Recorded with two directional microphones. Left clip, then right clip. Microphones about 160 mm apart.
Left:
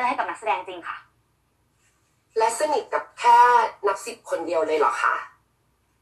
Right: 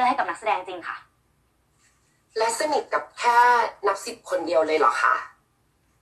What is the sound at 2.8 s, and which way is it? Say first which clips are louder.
Speech: left 4 dB; 25° right (ahead or behind).